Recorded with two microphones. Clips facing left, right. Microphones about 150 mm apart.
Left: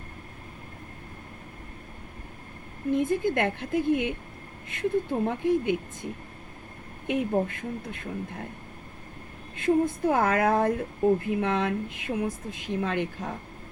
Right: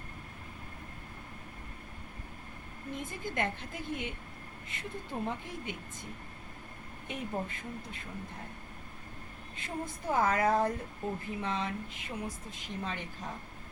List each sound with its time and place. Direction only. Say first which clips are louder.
2.9 s speech: left 14 dB; 60° left (ahead or behind)
7.1 s speech: left 11 dB; 60° left (ahead or behind)
9.6 s speech: left 16 dB; 60° left (ahead or behind)